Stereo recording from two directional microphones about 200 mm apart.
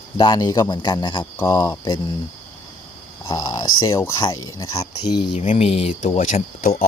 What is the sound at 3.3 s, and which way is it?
Speech, 20° left (ahead or behind).